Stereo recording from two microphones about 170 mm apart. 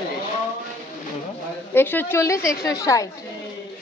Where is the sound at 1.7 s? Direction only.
10° left (ahead or behind).